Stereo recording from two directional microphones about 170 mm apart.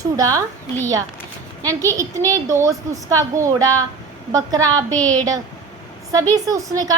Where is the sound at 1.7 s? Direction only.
20° right (ahead or behind).